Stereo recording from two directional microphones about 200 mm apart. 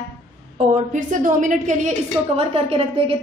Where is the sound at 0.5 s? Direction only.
40° right (ahead or behind).